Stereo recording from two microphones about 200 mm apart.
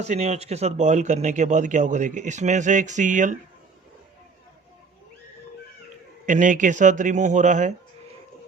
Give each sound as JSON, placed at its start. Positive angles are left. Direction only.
{"t": 0.0, "sound": "speech", "side_deg": -35}
{"t": 6.2, "sound": "speech", "side_deg": -40}